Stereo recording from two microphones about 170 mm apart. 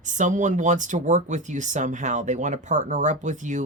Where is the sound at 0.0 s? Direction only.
45° right (ahead or behind).